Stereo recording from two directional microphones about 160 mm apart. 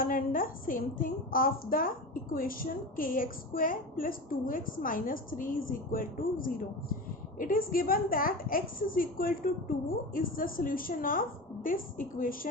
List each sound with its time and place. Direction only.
0.0 s a woman's voice: 60° left (ahead or behind)